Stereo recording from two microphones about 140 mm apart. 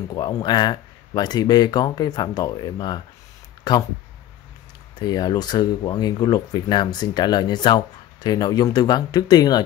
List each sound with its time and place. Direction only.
0.3 s speech: 30° left (ahead or behind)
4.9 s speech: 30° left (ahead or behind)